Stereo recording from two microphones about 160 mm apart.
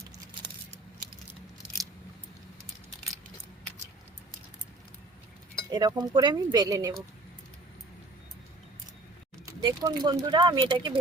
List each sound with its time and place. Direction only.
5.7 s speech: 25° right (ahead or behind)
9.5 s speech: 20° right (ahead or behind)